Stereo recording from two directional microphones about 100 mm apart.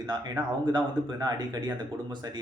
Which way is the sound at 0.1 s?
45° right (ahead or behind).